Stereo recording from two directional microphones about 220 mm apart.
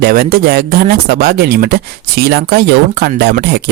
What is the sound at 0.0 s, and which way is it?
Speech, 40° right (ahead or behind).